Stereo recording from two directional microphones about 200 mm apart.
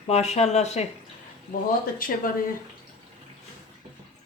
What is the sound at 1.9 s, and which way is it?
Speech, 45° left (ahead or behind).